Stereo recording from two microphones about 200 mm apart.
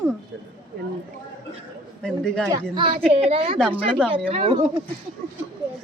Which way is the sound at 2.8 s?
25° right (ahead or behind).